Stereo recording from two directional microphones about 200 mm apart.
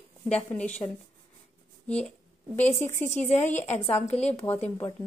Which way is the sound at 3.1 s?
35° left (ahead or behind).